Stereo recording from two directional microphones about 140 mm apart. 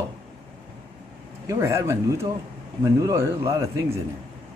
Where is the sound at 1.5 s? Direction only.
20° right (ahead or behind).